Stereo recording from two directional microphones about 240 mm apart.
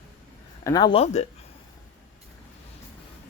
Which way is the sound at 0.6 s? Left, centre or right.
Centre.